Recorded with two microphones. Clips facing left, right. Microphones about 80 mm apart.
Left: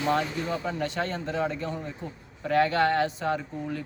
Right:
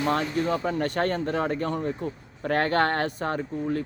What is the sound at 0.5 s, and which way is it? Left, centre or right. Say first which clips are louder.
Speech: right 4 dB; right.